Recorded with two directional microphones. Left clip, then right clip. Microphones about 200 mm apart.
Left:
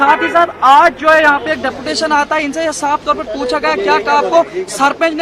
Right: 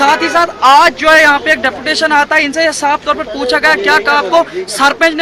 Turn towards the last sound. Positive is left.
turn(degrees=0)  # may be behind; listen again after turning